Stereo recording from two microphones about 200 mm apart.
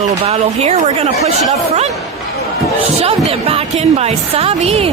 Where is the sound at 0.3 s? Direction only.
30° right (ahead or behind).